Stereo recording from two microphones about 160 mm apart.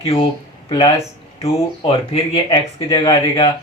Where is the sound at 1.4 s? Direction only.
35° left (ahead or behind).